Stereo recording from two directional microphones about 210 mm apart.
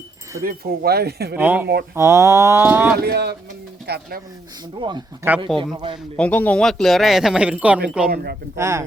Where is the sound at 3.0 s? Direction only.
50° right (ahead or behind).